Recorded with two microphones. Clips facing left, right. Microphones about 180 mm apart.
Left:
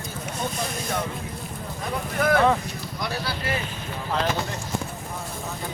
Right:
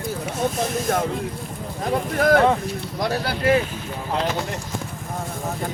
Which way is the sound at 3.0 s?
45° right (ahead or behind).